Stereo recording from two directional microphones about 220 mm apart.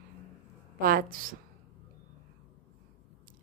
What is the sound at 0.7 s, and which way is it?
Speech, 40° right (ahead or behind).